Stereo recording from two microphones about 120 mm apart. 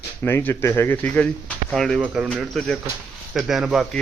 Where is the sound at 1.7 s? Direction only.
Centre (ahead or behind).